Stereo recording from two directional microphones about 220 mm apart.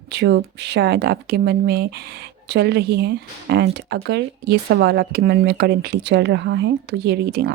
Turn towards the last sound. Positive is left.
turn(degrees=-45)  # may be behind; listen again after turning